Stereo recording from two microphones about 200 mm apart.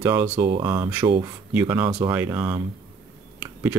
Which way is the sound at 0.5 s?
25° right (ahead or behind).